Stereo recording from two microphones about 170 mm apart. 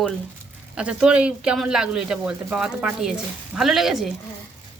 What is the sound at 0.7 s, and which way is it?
Speech, 5° right (ahead or behind).